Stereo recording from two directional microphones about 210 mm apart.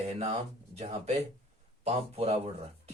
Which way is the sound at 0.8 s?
30° right (ahead or behind).